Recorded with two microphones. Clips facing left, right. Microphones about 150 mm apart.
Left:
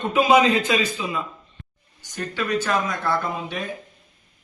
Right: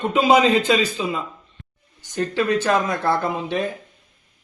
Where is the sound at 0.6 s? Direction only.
30° right (ahead or behind).